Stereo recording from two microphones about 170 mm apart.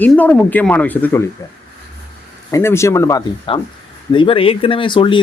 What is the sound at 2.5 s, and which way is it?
Speech, 15° left (ahead or behind).